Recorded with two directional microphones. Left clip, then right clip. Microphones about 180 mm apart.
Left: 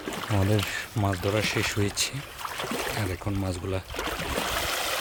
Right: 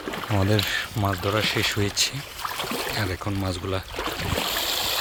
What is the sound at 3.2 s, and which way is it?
Speech, 5° right (ahead or behind).